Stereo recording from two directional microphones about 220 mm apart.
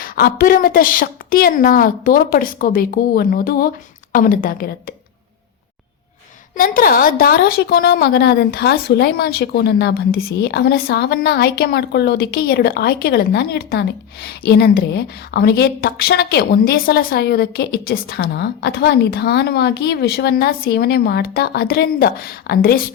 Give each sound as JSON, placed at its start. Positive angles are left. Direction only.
{"t": 0.0, "sound": "a woman's voice", "side_deg": 40}
{"t": 6.6, "sound": "a woman's voice", "side_deg": 40}